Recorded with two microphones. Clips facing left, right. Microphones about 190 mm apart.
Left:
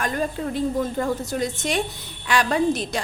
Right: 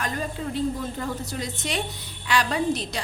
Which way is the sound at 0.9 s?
50° left (ahead or behind).